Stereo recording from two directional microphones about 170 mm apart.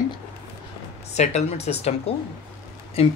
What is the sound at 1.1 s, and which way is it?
Speech, 40° left (ahead or behind).